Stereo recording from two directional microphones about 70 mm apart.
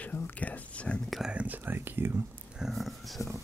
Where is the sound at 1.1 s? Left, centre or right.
Centre.